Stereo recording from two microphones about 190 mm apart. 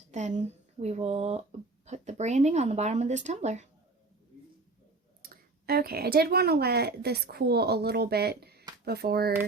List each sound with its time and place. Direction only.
0.1 s speech: 40° right (ahead or behind)
5.2 s a woman's voice: 50° right (ahead or behind)